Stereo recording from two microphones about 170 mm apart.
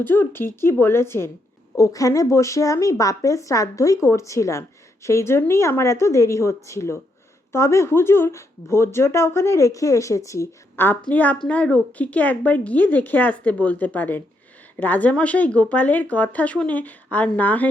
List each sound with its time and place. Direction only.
0.0 s a woman's voice: 10° left (ahead or behind)